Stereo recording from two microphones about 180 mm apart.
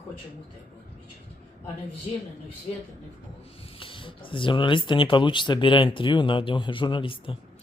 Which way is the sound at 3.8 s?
30° left (ahead or behind).